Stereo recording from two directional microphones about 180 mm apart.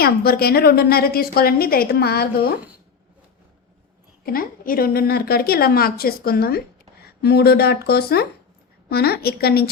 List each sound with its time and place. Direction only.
0.0 s a woman's voice: 60° left (ahead or behind)
4.3 s a woman's voice: 55° left (ahead or behind)